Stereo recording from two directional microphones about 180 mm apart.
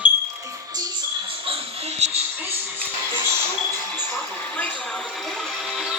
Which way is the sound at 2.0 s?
40° right (ahead or behind).